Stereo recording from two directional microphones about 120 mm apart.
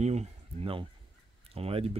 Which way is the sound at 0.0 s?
70° right (ahead or behind).